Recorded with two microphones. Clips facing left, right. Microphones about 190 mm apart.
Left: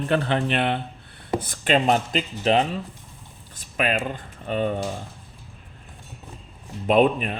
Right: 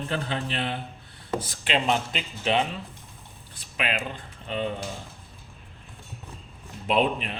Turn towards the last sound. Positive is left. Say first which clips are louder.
# left 6 dB
turn(degrees=50)  # may be behind; listen again after turning